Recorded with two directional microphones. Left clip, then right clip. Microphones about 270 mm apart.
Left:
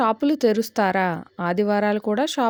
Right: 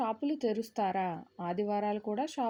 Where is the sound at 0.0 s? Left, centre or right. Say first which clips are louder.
Left 13 dB; left.